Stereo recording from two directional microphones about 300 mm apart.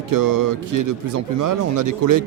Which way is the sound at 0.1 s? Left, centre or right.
Right.